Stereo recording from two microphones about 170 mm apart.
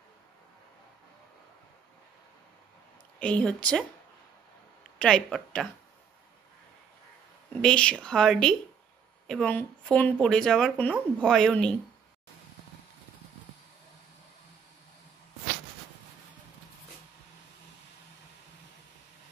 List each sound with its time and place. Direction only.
3.2 s speech: 5° left (ahead or behind)
4.9 s speech: 5° left (ahead or behind)
7.6 s speech: 5° left (ahead or behind)